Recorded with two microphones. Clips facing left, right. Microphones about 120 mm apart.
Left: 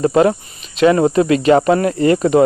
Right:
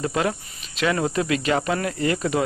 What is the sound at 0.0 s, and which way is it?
Speech, 35° left (ahead or behind).